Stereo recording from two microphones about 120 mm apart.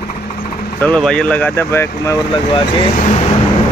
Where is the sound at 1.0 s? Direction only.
10° left (ahead or behind); by 2.2 s 25° left (ahead or behind).